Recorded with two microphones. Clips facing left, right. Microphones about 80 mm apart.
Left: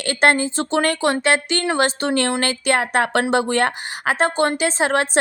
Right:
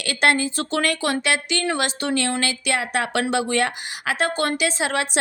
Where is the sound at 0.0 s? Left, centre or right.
Left.